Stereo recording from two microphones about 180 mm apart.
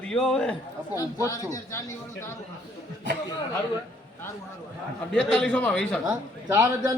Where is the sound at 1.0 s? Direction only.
20° left (ahead or behind).